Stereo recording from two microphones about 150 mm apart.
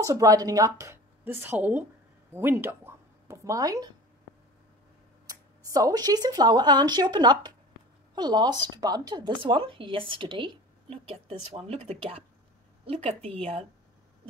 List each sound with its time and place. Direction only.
0.0 s a woman's voice: 20° right (ahead or behind)
5.3 s speech: 25° right (ahead or behind); by 13.7 s 40° right (ahead or behind)